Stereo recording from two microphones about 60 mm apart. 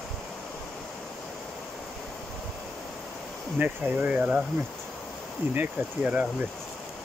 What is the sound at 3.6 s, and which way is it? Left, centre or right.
Speech, right.